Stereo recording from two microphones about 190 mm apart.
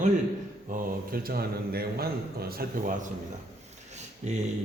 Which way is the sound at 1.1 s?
50° right (ahead or behind).